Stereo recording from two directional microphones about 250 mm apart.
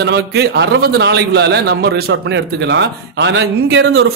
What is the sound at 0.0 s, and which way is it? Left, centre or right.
A man's voice, right.